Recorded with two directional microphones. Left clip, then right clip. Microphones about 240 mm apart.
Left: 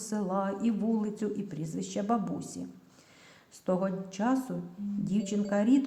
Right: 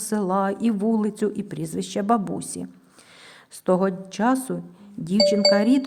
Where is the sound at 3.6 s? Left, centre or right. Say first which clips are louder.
Right 9 dB; right.